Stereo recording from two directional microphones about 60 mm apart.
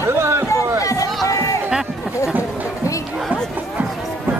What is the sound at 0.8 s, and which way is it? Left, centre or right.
Run, left.